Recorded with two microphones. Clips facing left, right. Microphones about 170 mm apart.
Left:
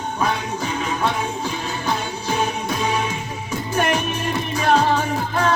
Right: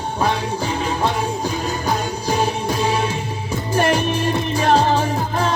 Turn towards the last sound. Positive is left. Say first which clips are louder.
# right 2 dB
turn(degrees=-30)  # may be behind; listen again after turning